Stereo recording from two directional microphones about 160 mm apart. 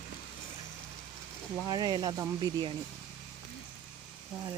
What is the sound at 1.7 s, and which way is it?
Speech, 25° right (ahead or behind).